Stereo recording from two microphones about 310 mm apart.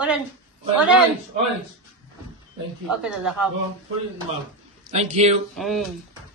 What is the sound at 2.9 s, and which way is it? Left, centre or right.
Speech, centre.